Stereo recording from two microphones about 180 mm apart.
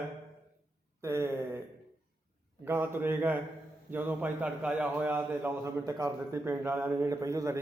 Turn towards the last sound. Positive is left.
turn(degrees=-15)  # may be behind; listen again after turning